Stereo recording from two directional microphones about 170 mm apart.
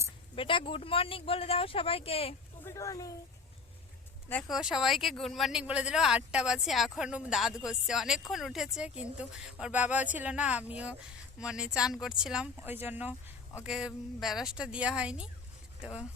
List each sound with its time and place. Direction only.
0.3 s speech: 30° left (ahead or behind)
2.6 s speech: 20° left (ahead or behind)
4.5 s speech: 5° right (ahead or behind)